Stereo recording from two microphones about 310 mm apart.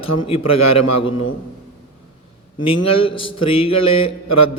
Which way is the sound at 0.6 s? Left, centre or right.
Left.